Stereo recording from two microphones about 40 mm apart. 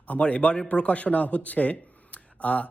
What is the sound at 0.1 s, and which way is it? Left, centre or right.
Speech, left.